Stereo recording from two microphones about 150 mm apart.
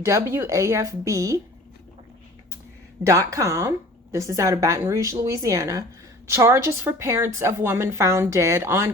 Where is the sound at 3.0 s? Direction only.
20° right (ahead or behind).